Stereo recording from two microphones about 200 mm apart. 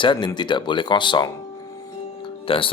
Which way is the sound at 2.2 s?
25° left (ahead or behind).